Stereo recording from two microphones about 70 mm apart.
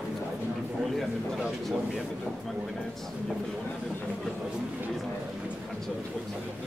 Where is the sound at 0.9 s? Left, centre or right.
Centre.